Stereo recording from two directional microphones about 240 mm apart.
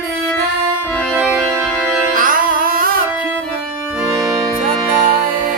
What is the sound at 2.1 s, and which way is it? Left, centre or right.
Music, right.